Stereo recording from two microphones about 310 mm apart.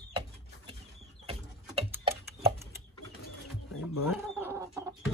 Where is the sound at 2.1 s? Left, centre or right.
Centre.